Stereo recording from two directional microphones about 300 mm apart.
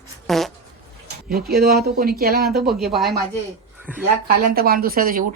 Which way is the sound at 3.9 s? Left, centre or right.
Centre.